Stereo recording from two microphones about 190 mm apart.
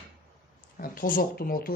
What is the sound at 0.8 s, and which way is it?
Speech, 45° left (ahead or behind).